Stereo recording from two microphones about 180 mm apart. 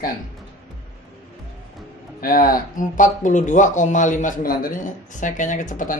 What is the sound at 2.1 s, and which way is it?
Speech, 50° left (ahead or behind).